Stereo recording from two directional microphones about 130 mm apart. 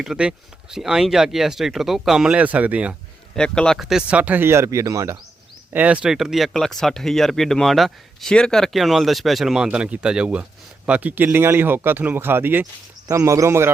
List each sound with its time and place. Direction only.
0.0 s speech: 5° right (ahead or behind)
3.3 s speech: 5° left (ahead or behind); by 5.1 s 25° right (ahead or behind)
5.7 s a man's voice: 10° right (ahead or behind)